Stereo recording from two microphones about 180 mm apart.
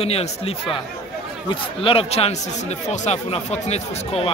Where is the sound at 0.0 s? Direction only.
35° left (ahead or behind).